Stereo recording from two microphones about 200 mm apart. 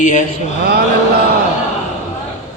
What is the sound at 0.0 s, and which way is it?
Speech, 40° left (ahead or behind).